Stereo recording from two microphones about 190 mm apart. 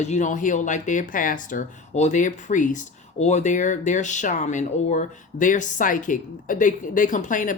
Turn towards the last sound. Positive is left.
turn(degrees=45)  # may be behind; listen again after turning